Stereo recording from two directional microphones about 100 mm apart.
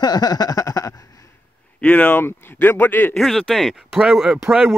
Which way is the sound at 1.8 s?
15° left (ahead or behind).